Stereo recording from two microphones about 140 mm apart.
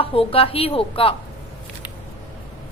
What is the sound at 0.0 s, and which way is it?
A woman's voice, 40° left (ahead or behind).